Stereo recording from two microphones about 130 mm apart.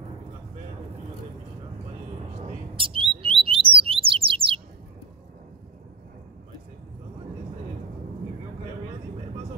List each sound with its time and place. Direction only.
2.7 s bird: 40° right (ahead or behind)